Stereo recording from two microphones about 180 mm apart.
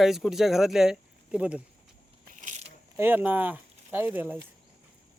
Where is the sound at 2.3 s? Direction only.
40° right (ahead or behind).